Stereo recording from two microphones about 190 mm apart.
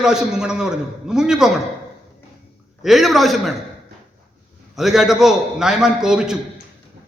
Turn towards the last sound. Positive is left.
turn(degrees=-5)  # may be behind; listen again after turning